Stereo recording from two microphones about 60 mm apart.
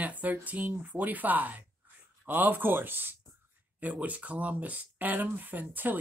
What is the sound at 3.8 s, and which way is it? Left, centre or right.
Speech, right.